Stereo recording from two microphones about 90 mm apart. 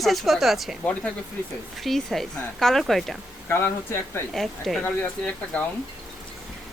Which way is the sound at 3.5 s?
30° left (ahead or behind).